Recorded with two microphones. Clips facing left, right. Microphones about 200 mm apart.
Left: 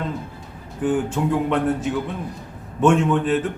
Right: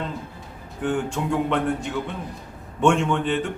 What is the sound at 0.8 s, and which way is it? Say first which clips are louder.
A man's voice: left 4 dB; 5° left (ahead or behind).